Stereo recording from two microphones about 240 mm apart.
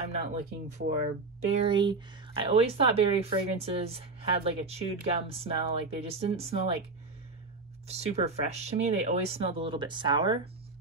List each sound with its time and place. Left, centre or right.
0.1 s speech: right
7.9 s speech: right